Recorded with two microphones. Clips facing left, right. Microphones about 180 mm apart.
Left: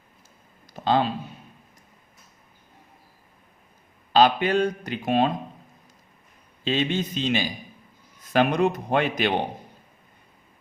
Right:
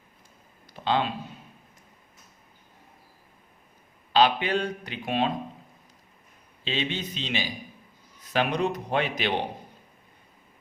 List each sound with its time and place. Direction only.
0.7 s a sound: 40° left (ahead or behind)
4.1 s speech: 45° left (ahead or behind)
6.7 s speech: 45° left (ahead or behind)